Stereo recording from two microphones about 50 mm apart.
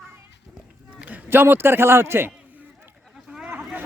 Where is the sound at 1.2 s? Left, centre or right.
Right.